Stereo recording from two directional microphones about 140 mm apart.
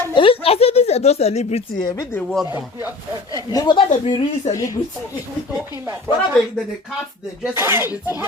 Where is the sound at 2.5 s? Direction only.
15° right (ahead or behind).